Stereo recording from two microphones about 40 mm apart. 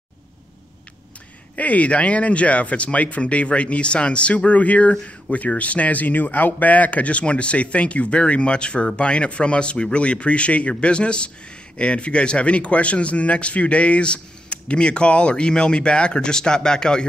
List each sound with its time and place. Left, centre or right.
1.6 s a man's voice: left; by 17.1 s centre